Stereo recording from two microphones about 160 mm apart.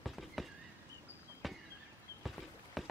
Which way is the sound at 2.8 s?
Centre (ahead or behind).